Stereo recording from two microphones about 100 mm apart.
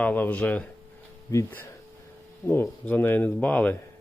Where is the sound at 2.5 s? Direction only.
20° left (ahead or behind).